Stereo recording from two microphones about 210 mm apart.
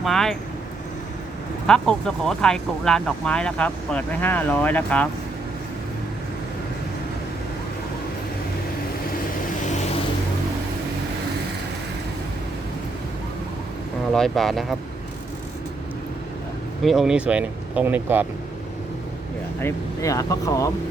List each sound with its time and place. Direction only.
0.0 s speech: centre (ahead or behind)
1.6 s speech: 5° left (ahead or behind)
14.1 s speech: centre (ahead or behind)
16.8 s speech: centre (ahead or behind)
19.5 s speech: 15° left (ahead or behind)